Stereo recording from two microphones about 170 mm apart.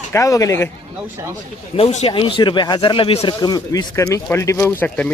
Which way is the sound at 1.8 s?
40° left (ahead or behind).